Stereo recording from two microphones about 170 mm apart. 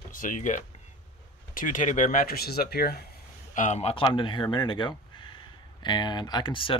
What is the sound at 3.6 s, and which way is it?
Speech, 45° left (ahead or behind).